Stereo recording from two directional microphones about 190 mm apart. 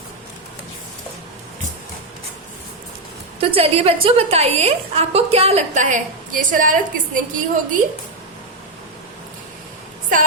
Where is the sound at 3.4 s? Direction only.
30° right (ahead or behind).